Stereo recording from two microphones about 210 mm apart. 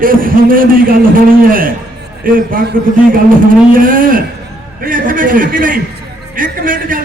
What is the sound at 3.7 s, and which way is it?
A man's voice, 40° right (ahead or behind).